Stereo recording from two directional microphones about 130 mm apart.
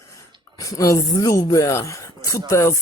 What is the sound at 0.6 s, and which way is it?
Speech, 25° left (ahead or behind).